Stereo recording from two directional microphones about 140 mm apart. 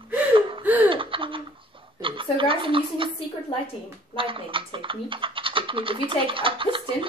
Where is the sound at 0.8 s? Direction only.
40° right (ahead or behind).